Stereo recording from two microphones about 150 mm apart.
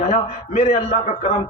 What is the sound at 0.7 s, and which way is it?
Speech, 45° left (ahead or behind).